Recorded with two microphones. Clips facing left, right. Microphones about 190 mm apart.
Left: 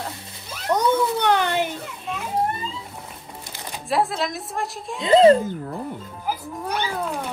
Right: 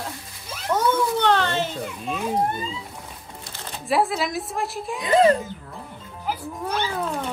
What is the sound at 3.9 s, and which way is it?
A woman's voice, centre (ahead or behind).